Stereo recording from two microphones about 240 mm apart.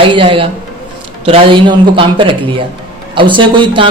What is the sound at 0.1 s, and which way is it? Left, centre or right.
Speech, right.